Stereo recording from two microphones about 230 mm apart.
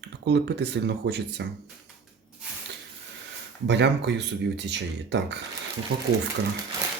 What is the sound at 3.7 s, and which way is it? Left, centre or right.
Speech, right.